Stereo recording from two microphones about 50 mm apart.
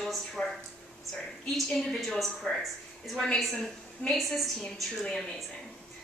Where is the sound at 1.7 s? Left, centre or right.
Centre.